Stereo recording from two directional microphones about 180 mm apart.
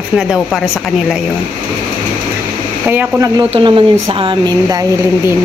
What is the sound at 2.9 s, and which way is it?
Speech, 15° right (ahead or behind).